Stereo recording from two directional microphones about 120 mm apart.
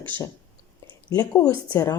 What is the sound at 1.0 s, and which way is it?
Speech, 30° left (ahead or behind).